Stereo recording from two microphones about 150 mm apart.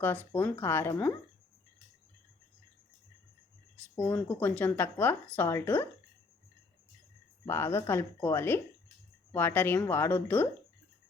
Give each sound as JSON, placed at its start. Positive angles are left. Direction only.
{"t": 0.0, "sound": "speech", "side_deg": 10}
{"t": 3.9, "sound": "speech", "side_deg": 10}
{"t": 7.4, "sound": "speech", "side_deg": 15}